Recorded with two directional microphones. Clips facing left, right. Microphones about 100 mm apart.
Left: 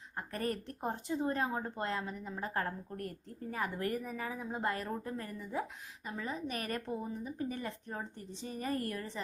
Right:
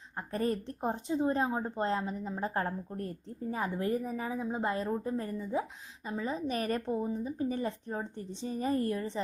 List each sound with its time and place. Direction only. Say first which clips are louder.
0.2 s a woman's voice: right 5 dB; 25° right (ahead or behind)